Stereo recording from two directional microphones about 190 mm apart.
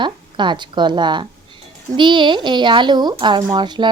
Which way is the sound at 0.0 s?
25° right (ahead or behind).